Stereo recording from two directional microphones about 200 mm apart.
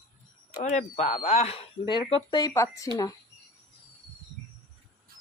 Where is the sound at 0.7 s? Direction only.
35° left (ahead or behind); by 2.9 s 15° left (ahead or behind).